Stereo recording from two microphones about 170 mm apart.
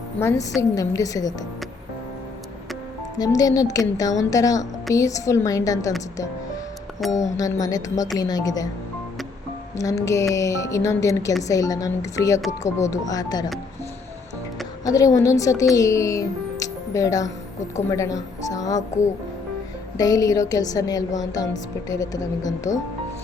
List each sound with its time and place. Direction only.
0.2 s a woman's voice: 15° left (ahead or behind)
3.2 s speech: 20° left (ahead or behind)
7.1 s speech: 20° left (ahead or behind)
9.7 s speech: 20° left (ahead or behind)
14.8 s speech: 20° left (ahead or behind)
20.0 s speech: 20° left (ahead or behind)